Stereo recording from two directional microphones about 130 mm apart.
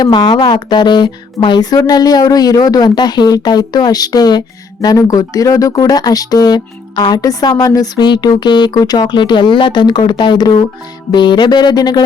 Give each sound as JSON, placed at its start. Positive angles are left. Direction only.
{"t": 0.0, "sound": "speech", "side_deg": 35}